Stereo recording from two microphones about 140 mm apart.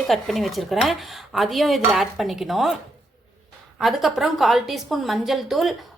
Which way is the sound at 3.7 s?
Centre (ahead or behind).